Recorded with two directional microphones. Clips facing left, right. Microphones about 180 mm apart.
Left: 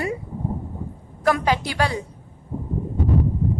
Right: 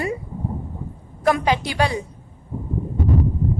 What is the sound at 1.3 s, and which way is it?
Speech, 20° right (ahead or behind).